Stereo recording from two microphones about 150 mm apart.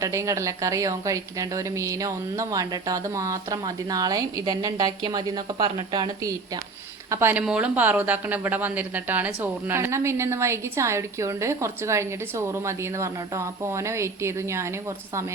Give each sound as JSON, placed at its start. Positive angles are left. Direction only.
{"t": 0.0, "sound": "a woman's voice", "side_deg": -20}
{"t": 7.1, "sound": "speech", "side_deg": -15}